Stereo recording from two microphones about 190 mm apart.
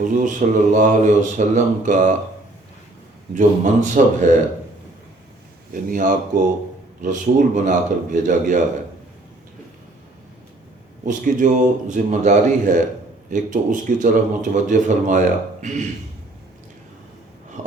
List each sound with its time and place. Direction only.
0.0 s speech: 45° right (ahead or behind)
3.3 s speech: 40° right (ahead or behind)
5.7 s a man's voice: 45° right (ahead or behind)
11.0 s speech: 45° right (ahead or behind)
17.6 s a sound: 40° right (ahead or behind)